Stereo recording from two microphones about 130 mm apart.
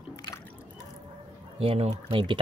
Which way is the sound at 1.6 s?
50° right (ahead or behind).